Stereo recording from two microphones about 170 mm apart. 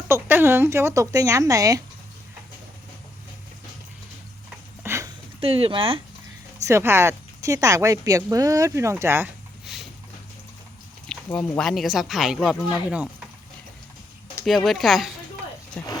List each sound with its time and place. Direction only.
0.1 s speech: 10° right (ahead or behind)
4.8 s a sound: 15° right (ahead or behind)
5.4 s speech: 35° right (ahead or behind)
6.7 s speech: 15° right (ahead or behind)
11.1 s speech: 5° left (ahead or behind)
14.4 s speech: centre (ahead or behind)